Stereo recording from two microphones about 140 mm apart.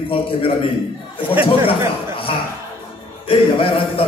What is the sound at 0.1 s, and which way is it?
Speech, 40° left (ahead or behind).